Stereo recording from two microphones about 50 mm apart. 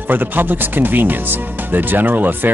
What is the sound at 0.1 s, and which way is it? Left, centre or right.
Speech, right.